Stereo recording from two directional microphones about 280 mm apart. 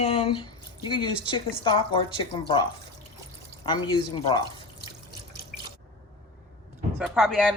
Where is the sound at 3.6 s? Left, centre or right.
Centre.